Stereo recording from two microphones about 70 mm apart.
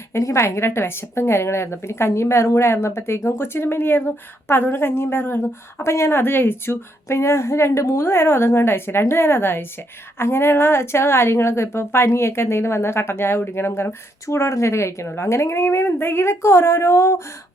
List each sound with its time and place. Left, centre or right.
0.1 s a woman's voice: left
5.8 s a woman's voice: left